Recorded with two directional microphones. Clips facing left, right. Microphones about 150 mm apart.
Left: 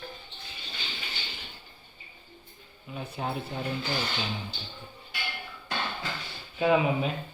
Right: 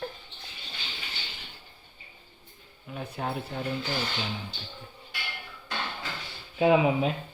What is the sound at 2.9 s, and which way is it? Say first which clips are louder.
Speech: even; centre (ahead or behind).